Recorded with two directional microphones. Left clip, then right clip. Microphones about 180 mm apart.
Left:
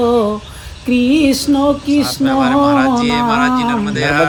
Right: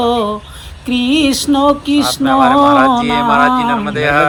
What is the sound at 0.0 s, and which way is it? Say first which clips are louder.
Music: left 1 dB; 15° left (ahead or behind).